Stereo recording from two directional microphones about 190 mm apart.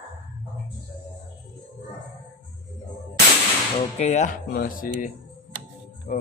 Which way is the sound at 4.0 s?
35° left (ahead or behind).